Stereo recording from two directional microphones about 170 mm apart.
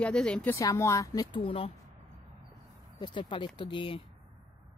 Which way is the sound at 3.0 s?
25° left (ahead or behind).